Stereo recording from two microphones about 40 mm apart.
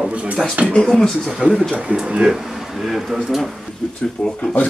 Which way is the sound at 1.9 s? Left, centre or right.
Right.